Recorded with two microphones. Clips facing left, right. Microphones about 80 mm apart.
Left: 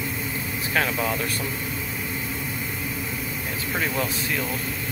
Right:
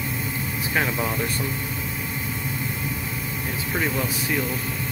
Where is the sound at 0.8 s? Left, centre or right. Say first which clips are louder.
Even; centre.